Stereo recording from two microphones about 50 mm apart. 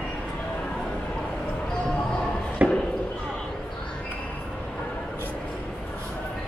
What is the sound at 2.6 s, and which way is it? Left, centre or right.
Speech, right.